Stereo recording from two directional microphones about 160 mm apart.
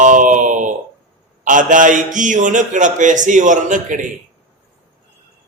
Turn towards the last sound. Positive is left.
turn(degrees=-55)  # may be behind; listen again after turning